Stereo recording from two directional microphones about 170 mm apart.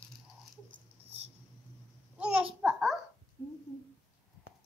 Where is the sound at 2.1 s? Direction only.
5° right (ahead or behind).